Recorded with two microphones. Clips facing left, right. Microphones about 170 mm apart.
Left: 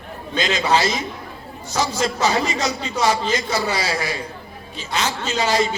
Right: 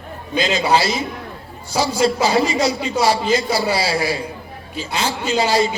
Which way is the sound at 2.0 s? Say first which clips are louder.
Right 5 dB; 30° right (ahead or behind).